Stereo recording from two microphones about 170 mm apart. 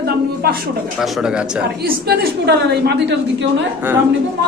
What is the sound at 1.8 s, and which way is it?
A woman's voice, 65° right (ahead or behind).